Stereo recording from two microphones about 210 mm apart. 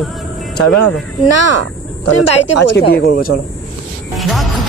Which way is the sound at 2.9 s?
45° left (ahead or behind).